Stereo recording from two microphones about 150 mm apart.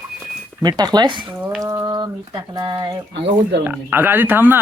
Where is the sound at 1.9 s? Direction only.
25° right (ahead or behind).